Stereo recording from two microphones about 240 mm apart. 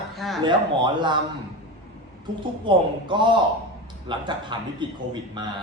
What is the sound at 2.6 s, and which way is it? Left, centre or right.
A man's voice, centre.